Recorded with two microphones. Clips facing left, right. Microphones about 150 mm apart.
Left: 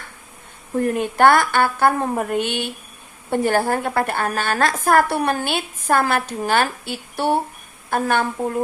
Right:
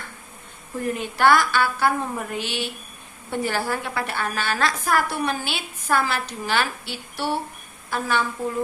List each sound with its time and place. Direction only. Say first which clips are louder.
0.8 s a woman's voice: left 6 dB; 55° left (ahead or behind)